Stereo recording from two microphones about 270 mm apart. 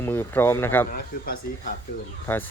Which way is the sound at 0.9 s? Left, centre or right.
Left.